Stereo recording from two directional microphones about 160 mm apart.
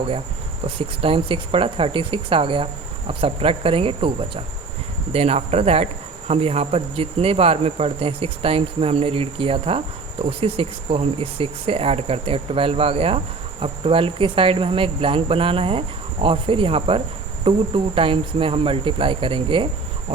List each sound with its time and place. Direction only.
0.8 s speech: 35° right (ahead or behind)
20.1 s cricket: 40° right (ahead or behind)